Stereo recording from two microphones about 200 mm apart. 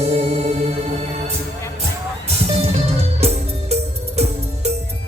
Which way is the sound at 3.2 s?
30° right (ahead or behind).